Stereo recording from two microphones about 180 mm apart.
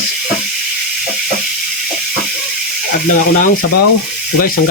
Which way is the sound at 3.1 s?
45° left (ahead or behind).